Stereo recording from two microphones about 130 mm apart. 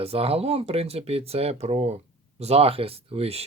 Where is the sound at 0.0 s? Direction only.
50° right (ahead or behind).